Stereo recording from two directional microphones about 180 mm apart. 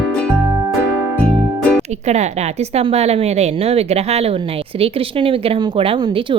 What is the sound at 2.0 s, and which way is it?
A woman's voice, 40° right (ahead or behind).